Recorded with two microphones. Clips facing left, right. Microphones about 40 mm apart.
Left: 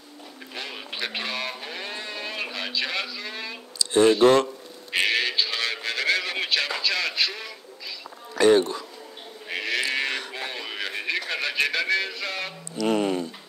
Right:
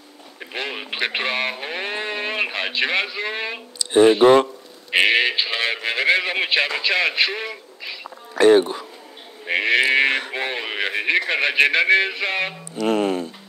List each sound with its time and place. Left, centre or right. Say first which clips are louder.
0.6 s speech: right 7 dB; right
3.9 s speech: right 4 dB; right
8.4 s speech: right 4 dB; right
9.5 s sheep: right 9 dB; right
12.8 s speech: right 3 dB; centre